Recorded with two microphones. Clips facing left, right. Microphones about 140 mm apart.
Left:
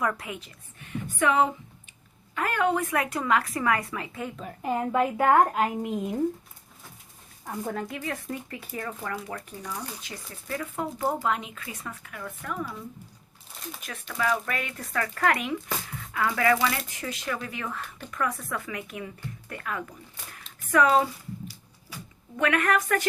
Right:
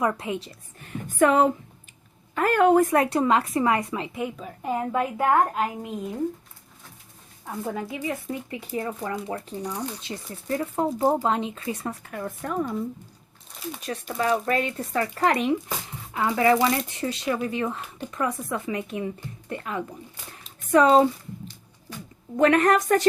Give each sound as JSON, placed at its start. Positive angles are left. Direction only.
{"t": 0.0, "sound": "speech", "side_deg": -25}
{"t": 0.4, "sound": "speech", "side_deg": -40}
{"t": 4.4, "sound": "a woman's voice", "side_deg": 0}
{"t": 7.4, "sound": "speech", "side_deg": -5}
{"t": 13.5, "sound": "a sound", "side_deg": 0}
{"t": 14.1, "sound": "speech", "side_deg": -35}
{"t": 20.3, "sound": "a sound", "side_deg": -25}
{"t": 22.4, "sound": "speech", "side_deg": -35}